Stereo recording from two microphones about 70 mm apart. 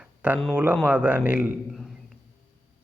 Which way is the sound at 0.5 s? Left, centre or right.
Right.